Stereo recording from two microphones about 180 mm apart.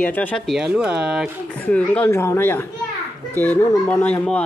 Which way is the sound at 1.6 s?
10° left (ahead or behind).